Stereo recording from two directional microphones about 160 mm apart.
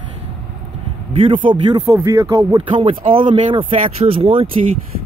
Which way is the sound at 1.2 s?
30° right (ahead or behind).